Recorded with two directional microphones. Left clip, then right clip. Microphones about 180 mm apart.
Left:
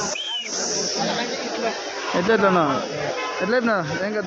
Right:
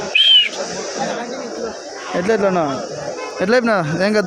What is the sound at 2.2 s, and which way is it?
Speech, 10° right (ahead or behind).